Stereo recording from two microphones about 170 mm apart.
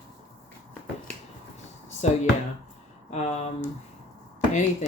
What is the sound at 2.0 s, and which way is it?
Speech, 40° left (ahead or behind).